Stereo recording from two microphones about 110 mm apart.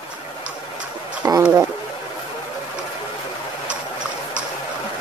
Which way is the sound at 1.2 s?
25° right (ahead or behind).